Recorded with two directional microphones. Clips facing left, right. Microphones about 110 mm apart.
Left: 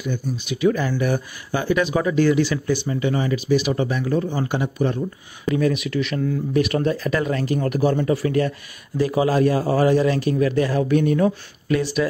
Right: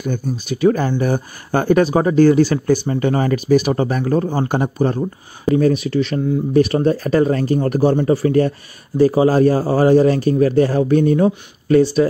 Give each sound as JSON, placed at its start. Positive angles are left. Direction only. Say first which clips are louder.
{"t": 0.0, "sound": "speech", "louder": "right 4 dB", "side_deg": -45}
{"t": 1.5, "sound": "speech", "louder": "right 6 dB", "side_deg": -50}